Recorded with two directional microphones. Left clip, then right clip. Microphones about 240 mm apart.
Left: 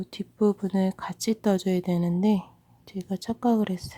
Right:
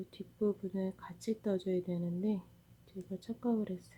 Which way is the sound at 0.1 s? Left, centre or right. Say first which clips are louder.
Left 11 dB; left.